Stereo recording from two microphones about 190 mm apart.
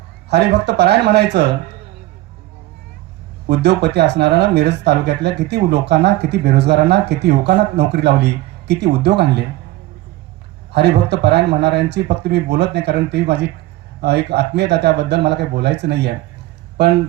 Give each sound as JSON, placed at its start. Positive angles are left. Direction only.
{"t": 0.3, "sound": "speech", "side_deg": -65}
{"t": 3.5, "sound": "speech", "side_deg": -60}
{"t": 10.7, "sound": "speech", "side_deg": -60}